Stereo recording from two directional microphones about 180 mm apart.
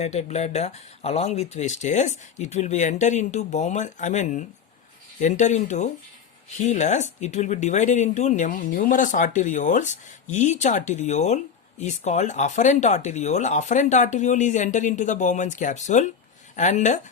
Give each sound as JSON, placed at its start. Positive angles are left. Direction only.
{"t": 0.0, "sound": "speech", "side_deg": 40}